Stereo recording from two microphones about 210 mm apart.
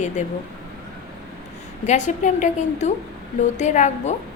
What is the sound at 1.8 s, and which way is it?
A woman's voice, 35° left (ahead or behind).